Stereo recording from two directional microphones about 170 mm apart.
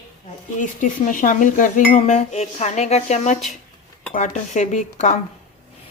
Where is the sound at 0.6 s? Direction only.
50° left (ahead or behind).